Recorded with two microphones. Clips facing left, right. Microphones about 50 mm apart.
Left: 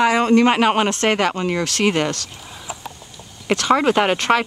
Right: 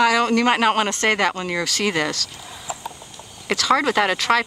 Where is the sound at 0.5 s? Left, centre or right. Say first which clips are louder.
Left 2 dB; centre.